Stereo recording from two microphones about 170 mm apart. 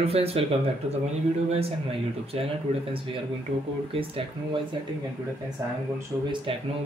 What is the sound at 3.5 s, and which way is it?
Speech, 35° right (ahead or behind).